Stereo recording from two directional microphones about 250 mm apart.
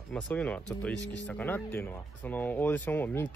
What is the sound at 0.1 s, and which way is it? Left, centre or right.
Speech, centre.